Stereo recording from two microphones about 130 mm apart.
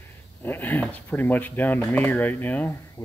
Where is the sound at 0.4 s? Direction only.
15° left (ahead or behind).